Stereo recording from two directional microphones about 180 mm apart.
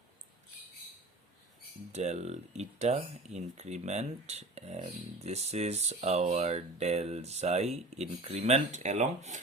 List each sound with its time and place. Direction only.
1.9 s speech: 40° right (ahead or behind)